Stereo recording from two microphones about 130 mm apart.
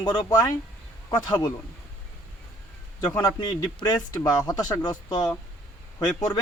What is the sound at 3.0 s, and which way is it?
Speech, 30° left (ahead or behind).